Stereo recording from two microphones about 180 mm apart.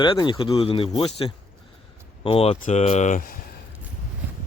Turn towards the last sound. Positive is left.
turn(degrees=45)  # may be behind; listen again after turning